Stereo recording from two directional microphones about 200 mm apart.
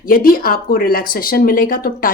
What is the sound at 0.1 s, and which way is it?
Speech, 45° left (ahead or behind).